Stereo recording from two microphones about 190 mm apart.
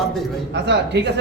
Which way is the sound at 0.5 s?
65° right (ahead or behind).